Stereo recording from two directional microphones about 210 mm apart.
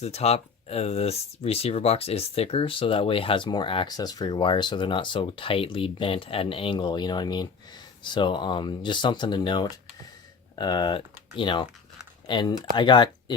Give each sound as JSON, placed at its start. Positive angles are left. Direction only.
{"t": 0.0, "sound": "speech", "side_deg": 30}